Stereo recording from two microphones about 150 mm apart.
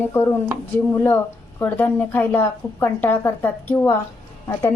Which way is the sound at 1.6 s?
10° left (ahead or behind).